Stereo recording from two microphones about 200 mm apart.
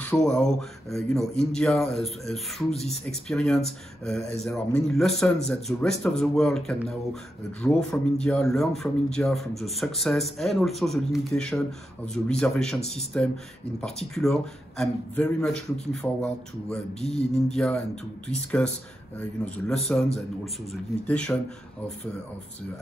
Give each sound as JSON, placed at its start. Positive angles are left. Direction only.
{"t": 0.0, "sound": "speech", "side_deg": 5}
{"t": 17.0, "sound": "speech", "side_deg": 30}
{"t": 17.5, "sound": "speech", "side_deg": 5}
{"t": 19.1, "sound": "a man's voice", "side_deg": 5}